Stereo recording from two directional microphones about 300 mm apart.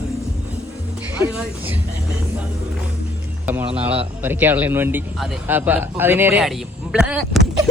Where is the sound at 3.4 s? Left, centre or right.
Centre.